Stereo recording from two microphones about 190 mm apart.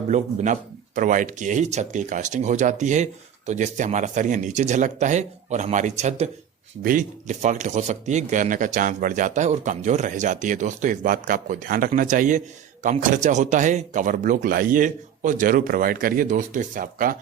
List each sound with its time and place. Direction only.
0.1 s speech: 40° right (ahead or behind)